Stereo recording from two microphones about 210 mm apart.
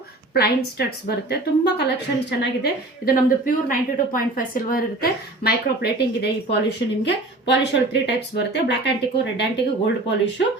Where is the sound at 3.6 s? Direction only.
40° left (ahead or behind).